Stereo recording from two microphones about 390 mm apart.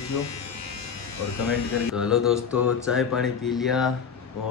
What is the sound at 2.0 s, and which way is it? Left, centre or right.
Mantra, centre.